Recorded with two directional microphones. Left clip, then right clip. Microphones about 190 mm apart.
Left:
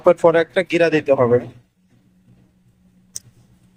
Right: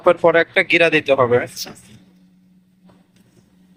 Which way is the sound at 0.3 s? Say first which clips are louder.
Right 1 dB; 25° left (ahead or behind).